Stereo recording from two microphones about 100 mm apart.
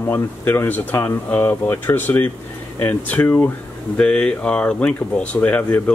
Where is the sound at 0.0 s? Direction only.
20° left (ahead or behind).